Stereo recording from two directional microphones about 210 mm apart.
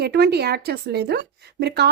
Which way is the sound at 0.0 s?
50° right (ahead or behind).